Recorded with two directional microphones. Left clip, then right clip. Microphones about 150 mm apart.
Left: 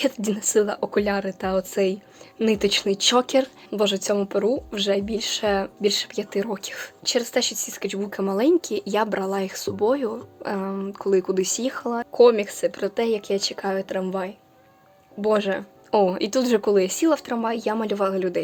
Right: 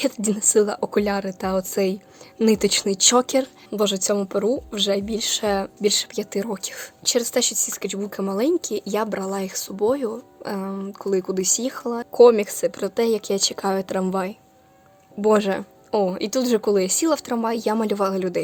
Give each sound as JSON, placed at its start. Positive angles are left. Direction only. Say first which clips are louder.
{"t": 0.0, "sound": "speech", "louder": "right 1 dB", "side_deg": -30}
{"t": 12.1, "sound": "speech", "louder": "right 3 dB", "side_deg": -40}
{"t": 15.2, "sound": "speech", "louder": "right 3 dB", "side_deg": -45}
{"t": 15.9, "sound": "speech", "louder": "left 2 dB", "side_deg": -20}